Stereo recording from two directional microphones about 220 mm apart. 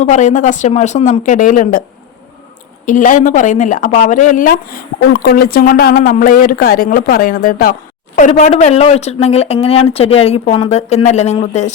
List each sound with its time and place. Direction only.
0.0 s speech: 35° left (ahead or behind)
2.8 s speech: 35° left (ahead or behind)